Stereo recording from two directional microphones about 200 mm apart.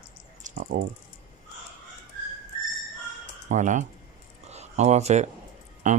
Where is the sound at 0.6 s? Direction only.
55° right (ahead or behind).